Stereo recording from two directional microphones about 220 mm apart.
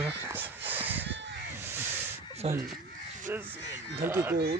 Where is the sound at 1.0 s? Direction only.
55° right (ahead or behind).